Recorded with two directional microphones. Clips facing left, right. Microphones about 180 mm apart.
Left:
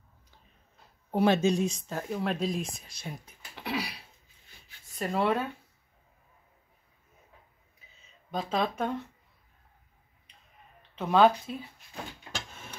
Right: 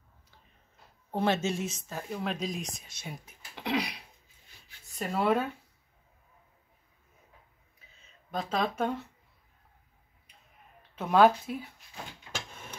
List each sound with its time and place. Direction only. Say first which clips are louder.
1.1 s speech: left 5 dB; 15° left (ahead or behind)
2.2 s speech: left 4 dB; 5° left (ahead or behind)
3.5 s a sound: right 3 dB; 15° right (ahead or behind)
4.9 s speech: even; centre (ahead or behind)
8.3 s speech: left 1 dB; centre (ahead or behind)
11.0 s speech: even; 5° right (ahead or behind)